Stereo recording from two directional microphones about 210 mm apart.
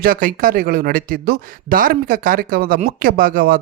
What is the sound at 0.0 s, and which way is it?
Speech, 40° right (ahead or behind).